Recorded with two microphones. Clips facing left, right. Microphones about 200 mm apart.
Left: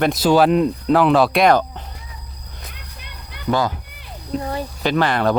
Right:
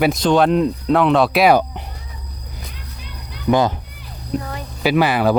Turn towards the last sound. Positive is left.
turn(degrees=-5)  # may be behind; listen again after turning